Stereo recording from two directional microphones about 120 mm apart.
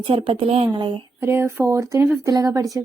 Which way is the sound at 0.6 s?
40° right (ahead or behind).